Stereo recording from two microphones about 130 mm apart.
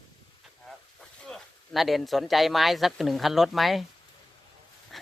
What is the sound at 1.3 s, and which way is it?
Speech, centre (ahead or behind).